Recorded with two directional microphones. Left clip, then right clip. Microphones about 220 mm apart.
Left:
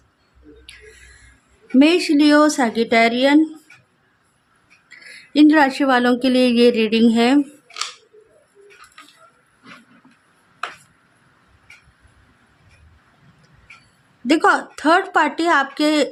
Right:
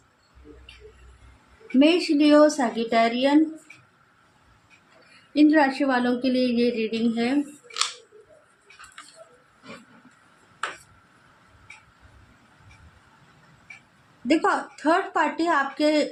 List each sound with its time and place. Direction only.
1.8 s speech: 35° left (ahead or behind)
5.3 s speech: 35° left (ahead or behind)
14.3 s speech: 40° left (ahead or behind)